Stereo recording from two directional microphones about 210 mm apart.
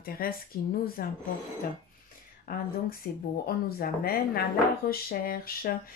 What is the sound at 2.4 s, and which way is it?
Speech, 45° left (ahead or behind).